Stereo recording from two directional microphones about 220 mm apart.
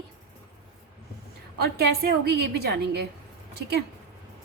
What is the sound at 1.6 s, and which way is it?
A woman's voice, 45° right (ahead or behind).